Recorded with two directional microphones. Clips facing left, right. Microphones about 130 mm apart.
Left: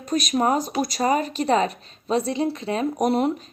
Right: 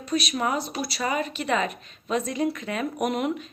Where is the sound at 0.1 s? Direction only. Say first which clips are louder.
Left 5 dB; 45° left (ahead or behind).